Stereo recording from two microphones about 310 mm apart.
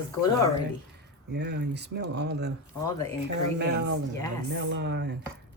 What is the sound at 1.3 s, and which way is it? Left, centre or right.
Speech, right.